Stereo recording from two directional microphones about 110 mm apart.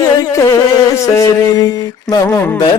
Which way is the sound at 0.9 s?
30° left (ahead or behind).